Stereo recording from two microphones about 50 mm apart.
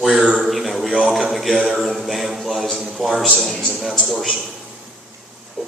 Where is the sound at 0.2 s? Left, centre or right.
Centre.